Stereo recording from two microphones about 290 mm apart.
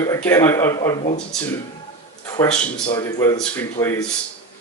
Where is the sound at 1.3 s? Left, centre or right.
Centre.